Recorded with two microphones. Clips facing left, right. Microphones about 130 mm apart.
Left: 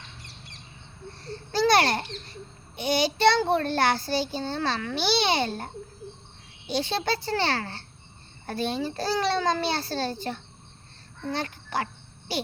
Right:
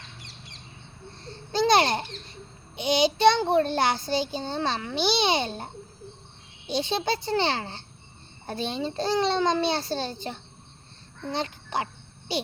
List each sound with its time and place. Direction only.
1.2 s babbling: 20° right (ahead or behind)
2.7 s a child's voice: 20° right (ahead or behind)